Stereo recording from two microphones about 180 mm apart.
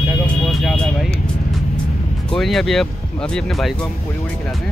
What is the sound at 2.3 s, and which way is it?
Speech, centre (ahead or behind).